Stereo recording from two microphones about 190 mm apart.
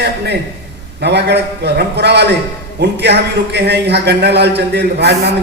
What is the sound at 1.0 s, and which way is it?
A man's voice, 60° right (ahead or behind).